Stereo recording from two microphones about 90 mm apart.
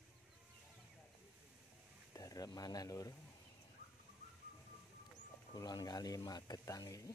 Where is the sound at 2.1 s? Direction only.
40° left (ahead or behind).